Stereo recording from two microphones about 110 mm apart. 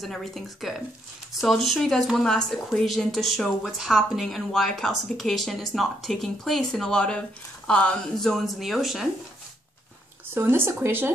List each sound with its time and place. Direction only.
0.0 s speech: centre (ahead or behind)
10.3 s speech: 20° right (ahead or behind)